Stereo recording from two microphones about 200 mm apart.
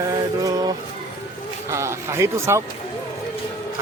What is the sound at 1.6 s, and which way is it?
Music, 15° right (ahead or behind).